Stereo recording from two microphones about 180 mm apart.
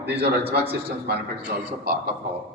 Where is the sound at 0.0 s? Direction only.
65° right (ahead or behind).